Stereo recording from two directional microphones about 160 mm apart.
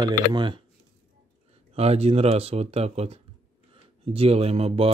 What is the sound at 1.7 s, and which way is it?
Speech, 40° right (ahead or behind).